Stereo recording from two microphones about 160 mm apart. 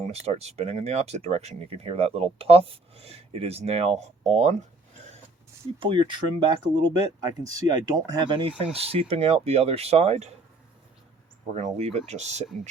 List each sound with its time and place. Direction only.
0.0 s speech: 40° right (ahead or behind)
5.8 s speech: 30° right (ahead or behind)
11.5 s speech: 45° right (ahead or behind)